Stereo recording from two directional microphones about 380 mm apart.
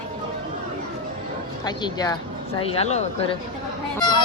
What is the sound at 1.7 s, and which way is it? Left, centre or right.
A woman's voice, centre.